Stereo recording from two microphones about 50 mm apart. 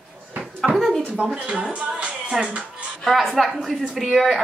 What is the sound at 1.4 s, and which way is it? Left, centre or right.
Speech, centre.